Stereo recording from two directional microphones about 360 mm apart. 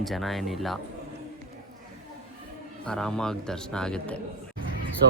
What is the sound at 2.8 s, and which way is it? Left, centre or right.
Speech, centre.